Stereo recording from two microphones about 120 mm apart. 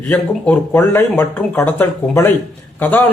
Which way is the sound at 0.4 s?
15° left (ahead or behind).